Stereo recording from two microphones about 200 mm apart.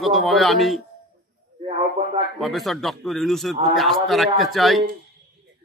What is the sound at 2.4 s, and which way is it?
Speech, centre (ahead or behind).